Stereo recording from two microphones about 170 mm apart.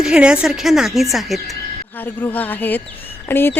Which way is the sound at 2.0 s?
10° left (ahead or behind).